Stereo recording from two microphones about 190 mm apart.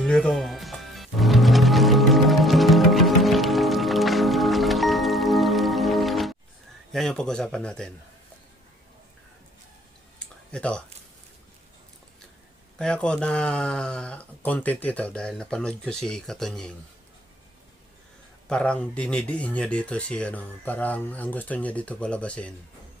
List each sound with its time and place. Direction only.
0.0 s music: 5° left (ahead or behind)
6.9 s speech: centre (ahead or behind)
10.5 s speech: 5° left (ahead or behind)
12.8 s speech: 5° left (ahead or behind)
18.4 s speech: 5° left (ahead or behind)